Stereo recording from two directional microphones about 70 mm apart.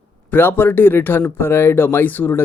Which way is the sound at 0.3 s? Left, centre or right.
Left.